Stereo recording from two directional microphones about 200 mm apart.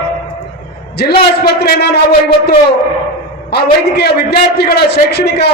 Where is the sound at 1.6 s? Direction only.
55° left (ahead or behind).